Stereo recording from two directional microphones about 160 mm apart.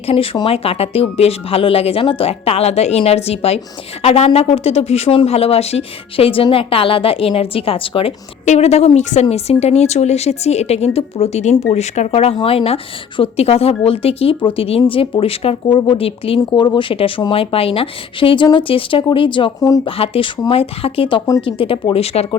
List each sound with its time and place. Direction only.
0.1 s a woman's voice: 35° left (ahead or behind)